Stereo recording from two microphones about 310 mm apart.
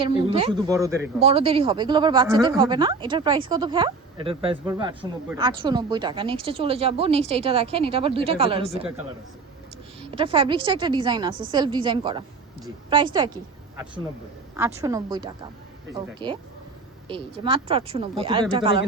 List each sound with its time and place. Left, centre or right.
0.2 s speech: centre
1.2 s speech: centre
10.1 s a woman's voice: centre